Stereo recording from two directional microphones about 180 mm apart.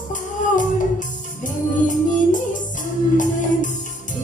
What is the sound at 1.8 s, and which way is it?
Music, 45° left (ahead or behind).